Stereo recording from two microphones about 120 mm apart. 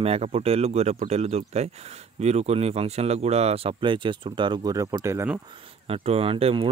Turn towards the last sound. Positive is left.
turn(degrees=-50)  # may be behind; listen again after turning